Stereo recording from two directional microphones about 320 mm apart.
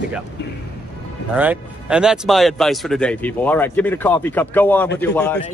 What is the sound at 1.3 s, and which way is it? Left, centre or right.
Speech, centre.